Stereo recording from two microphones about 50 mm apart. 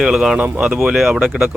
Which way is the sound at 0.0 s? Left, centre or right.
Centre.